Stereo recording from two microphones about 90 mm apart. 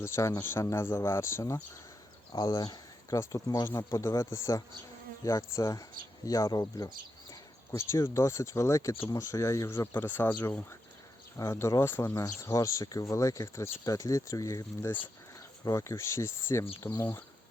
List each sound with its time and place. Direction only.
0.0 s speech: 30° left (ahead or behind)
2.3 s speech: 45° left (ahead or behind); by 10.4 s 20° left (ahead or behind)
11.3 s speech: 35° left (ahead or behind)